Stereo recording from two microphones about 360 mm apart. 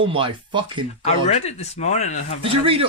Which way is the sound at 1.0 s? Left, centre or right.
Centre.